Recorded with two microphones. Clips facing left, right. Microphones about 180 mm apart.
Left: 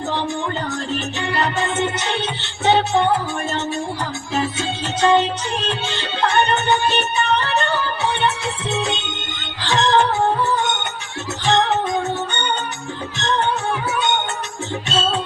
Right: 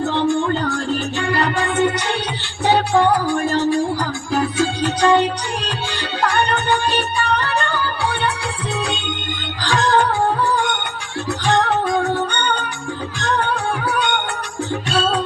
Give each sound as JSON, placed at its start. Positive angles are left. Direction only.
{"t": 0.3, "sound": "music", "side_deg": 20}
{"t": 11.4, "sound": "music", "side_deg": 20}